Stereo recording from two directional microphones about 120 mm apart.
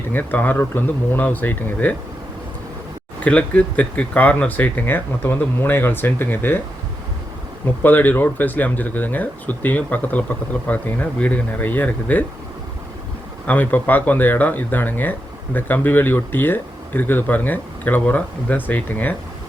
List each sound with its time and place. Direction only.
0.1 s speech: 15° left (ahead or behind)
3.2 s speech: 10° left (ahead or behind)
7.8 s speech: 15° left (ahead or behind)
13.5 s speech: 15° left (ahead or behind)